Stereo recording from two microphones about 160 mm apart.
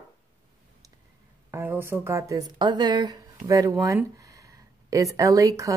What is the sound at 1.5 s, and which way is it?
A woman's voice, 15° right (ahead or behind).